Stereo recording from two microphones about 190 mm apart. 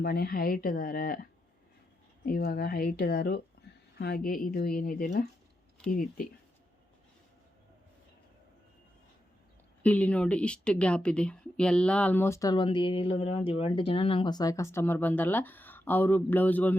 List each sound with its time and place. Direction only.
0.0 s speech: 55° left (ahead or behind)
9.8 s a woman's voice: 5° left (ahead or behind)